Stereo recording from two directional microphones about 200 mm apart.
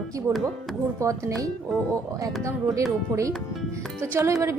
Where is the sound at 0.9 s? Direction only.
15° right (ahead or behind).